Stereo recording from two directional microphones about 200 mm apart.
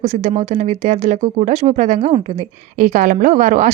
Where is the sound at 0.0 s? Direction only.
35° right (ahead or behind).